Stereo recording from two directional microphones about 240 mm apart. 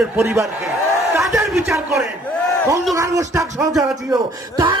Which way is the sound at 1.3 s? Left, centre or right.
Centre.